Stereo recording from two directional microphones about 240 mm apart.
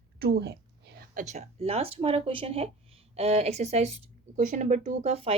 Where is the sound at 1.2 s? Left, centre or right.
Right.